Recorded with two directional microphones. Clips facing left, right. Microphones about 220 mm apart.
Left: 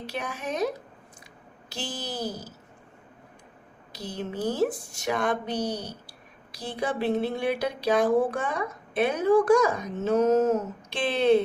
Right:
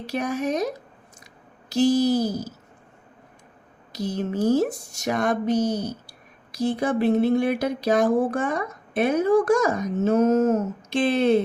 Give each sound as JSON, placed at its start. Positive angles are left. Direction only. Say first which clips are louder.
{"t": 0.0, "sound": "speech", "louder": "right 8 dB", "side_deg": -40}
{"t": 1.7, "sound": "speech", "louder": "right 16 dB", "side_deg": -40}
{"t": 3.9, "sound": "speech", "louder": "right 7 dB", "side_deg": -40}